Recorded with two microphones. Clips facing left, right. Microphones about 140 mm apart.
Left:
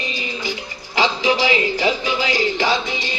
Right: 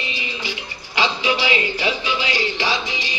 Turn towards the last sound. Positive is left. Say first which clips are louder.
# left 4 dB
turn(degrees=50)  # may be behind; listen again after turning